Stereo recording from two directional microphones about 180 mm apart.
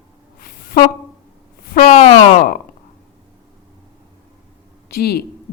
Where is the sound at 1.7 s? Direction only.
40° left (ahead or behind).